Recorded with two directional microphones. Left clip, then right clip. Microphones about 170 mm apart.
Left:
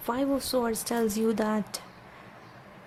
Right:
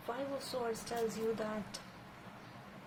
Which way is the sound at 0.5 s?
50° left (ahead or behind).